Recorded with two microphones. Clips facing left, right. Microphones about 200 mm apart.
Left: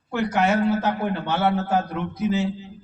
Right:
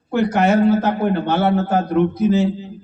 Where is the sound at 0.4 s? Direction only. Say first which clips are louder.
Right 6 dB; 25° right (ahead or behind).